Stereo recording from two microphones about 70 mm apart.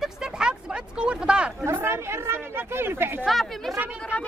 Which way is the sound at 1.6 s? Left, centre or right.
Right.